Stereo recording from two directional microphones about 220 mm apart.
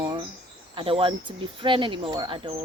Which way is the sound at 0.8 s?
25° right (ahead or behind).